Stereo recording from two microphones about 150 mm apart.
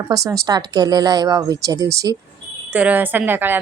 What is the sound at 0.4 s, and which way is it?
Speech, 25° right (ahead or behind).